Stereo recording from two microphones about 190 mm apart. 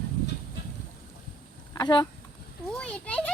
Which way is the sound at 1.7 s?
25° left (ahead or behind).